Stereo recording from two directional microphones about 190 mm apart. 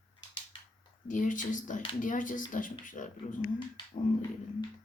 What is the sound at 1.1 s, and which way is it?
Speech, 45° left (ahead or behind).